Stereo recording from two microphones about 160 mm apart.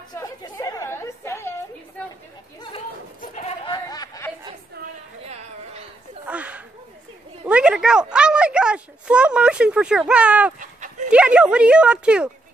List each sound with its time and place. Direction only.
0.1 s chatter: 25° left (ahead or behind)
3.2 s sheep: 45° left (ahead or behind)
3.6 s a sound: 25° left (ahead or behind)
6.2 s a sound: 10° right (ahead or behind)
10.6 s dog: 50° right (ahead or behind)
11.1 s speech: 5° right (ahead or behind)